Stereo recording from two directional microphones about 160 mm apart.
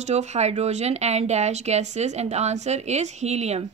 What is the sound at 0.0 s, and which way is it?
Speech, 45° right (ahead or behind).